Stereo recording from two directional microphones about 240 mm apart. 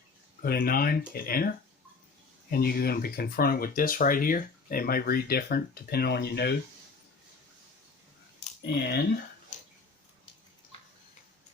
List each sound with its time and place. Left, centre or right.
0.4 s speech: left
8.4 s speech: left